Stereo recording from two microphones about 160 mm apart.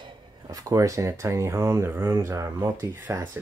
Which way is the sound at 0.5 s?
20° right (ahead or behind).